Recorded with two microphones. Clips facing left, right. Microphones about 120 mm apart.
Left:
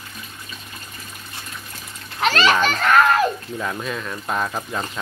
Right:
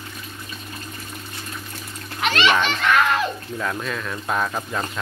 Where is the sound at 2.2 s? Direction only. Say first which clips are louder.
Left 2 dB; 40° left (ahead or behind).